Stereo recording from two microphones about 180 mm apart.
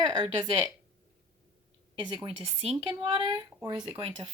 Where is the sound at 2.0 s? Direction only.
25° right (ahead or behind).